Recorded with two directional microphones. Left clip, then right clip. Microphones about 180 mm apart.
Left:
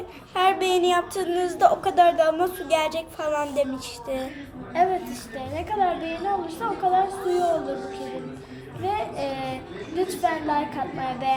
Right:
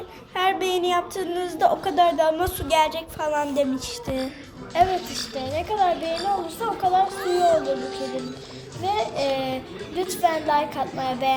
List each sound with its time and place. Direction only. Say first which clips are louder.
0.3 s a woman's voice: left 2 dB; centre (ahead or behind)
4.7 s a child's voice: right 2 dB; 30° right (ahead or behind)
8.8 s a child's voice: right 3 dB; 35° right (ahead or behind)